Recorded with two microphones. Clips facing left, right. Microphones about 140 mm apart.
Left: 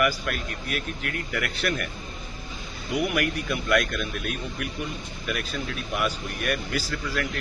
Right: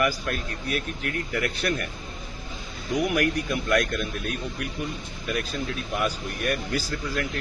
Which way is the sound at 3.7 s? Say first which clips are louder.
Even; 40° right (ahead or behind).